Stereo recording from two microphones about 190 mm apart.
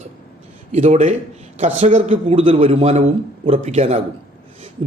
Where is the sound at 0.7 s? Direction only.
35° right (ahead or behind).